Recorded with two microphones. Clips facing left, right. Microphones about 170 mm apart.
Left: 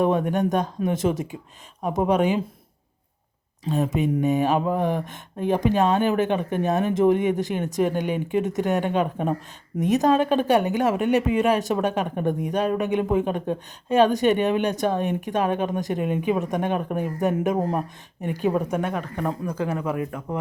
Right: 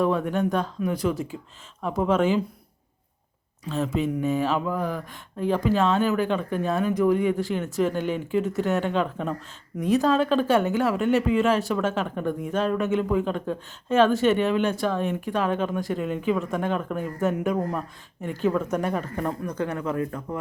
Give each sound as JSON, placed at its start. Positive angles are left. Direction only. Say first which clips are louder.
{"t": 0.0, "sound": "speech", "louder": "left 2 dB", "side_deg": 20}
{"t": 3.7, "sound": "speech", "louder": "left 3 dB", "side_deg": 15}
{"t": 18.8, "sound": "speech", "louder": "even", "side_deg": 0}